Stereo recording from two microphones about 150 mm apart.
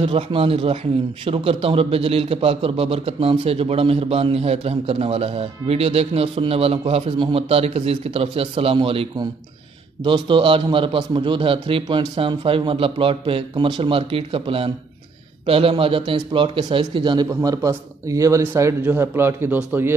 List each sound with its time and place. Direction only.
0.0 s a man's voice: 35° right (ahead or behind); by 19.9 s 15° right (ahead or behind)